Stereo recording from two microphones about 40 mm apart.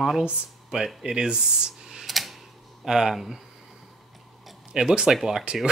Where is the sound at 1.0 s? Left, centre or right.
Centre.